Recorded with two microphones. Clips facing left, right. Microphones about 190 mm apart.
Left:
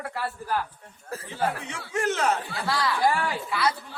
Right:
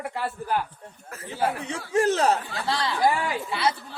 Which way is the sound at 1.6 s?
35° right (ahead or behind).